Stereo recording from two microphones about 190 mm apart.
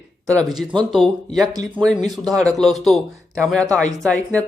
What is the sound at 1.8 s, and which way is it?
A man's voice, centre (ahead or behind).